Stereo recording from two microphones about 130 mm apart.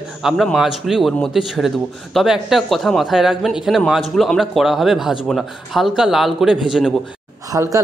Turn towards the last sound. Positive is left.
turn(degrees=-25)  # may be behind; listen again after turning